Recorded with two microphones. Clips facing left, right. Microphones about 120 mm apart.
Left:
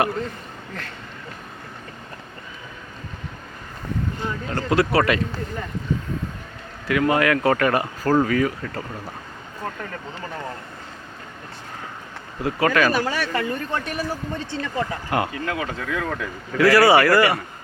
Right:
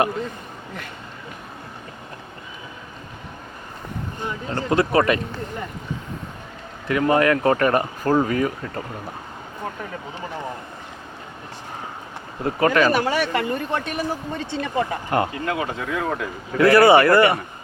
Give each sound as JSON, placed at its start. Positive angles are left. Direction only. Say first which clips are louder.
{"t": 4.2, "sound": "speech", "louder": "even", "side_deg": -20}
{"t": 6.8, "sound": "speech", "louder": "right 1 dB", "side_deg": -35}
{"t": 9.8, "sound": "speech", "louder": "right 1 dB", "side_deg": -15}
{"t": 12.5, "sound": "speech", "louder": "right 2 dB", "side_deg": -30}